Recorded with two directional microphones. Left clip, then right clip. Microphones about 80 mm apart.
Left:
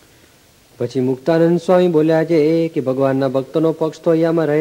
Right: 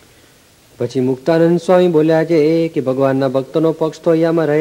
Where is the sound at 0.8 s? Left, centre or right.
Left.